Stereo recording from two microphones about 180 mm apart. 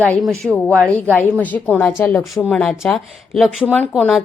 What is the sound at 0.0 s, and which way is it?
A woman's voice, 5° left (ahead or behind).